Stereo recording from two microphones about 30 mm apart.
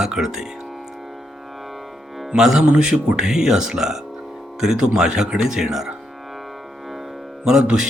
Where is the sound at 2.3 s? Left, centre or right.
Centre.